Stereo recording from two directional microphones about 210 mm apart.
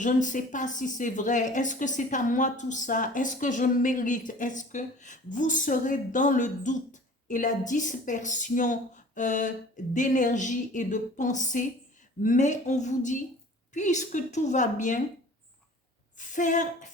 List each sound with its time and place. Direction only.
0.0 s a woman's voice: 35° left (ahead or behind)
16.1 s a woman's voice: 35° left (ahead or behind)